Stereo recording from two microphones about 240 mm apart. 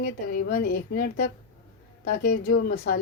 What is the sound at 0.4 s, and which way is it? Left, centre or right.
A woman's voice, left.